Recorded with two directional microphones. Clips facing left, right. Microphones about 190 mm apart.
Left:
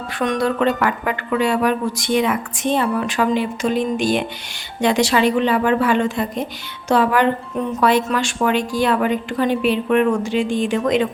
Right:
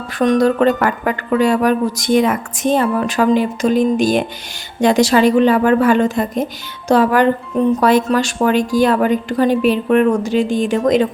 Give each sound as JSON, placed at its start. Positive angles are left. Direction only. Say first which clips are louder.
{"t": 0.2, "sound": "a woman's voice", "louder": "right 6 dB", "side_deg": -40}